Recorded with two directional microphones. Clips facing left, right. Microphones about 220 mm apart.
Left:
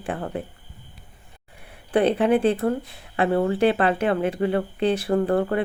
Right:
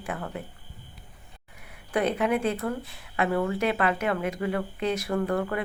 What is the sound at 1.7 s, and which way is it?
Speech, 30° left (ahead or behind).